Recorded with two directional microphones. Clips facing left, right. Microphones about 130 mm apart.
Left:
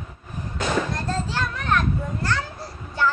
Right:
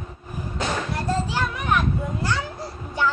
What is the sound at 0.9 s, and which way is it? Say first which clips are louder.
Children playing: right 2 dB; 10° right (ahead or behind).